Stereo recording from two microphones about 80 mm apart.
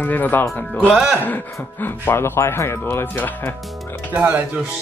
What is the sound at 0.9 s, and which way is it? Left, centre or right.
Speech, centre.